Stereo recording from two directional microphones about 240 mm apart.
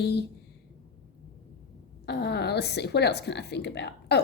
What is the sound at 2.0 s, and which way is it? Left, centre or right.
A woman's voice, left.